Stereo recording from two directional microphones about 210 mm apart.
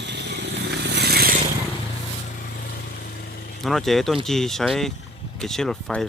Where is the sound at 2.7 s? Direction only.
45° left (ahead or behind).